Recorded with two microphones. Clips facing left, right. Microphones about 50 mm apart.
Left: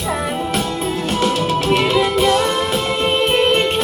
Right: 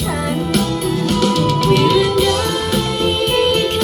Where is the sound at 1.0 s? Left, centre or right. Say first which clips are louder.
Right 2 dB; left.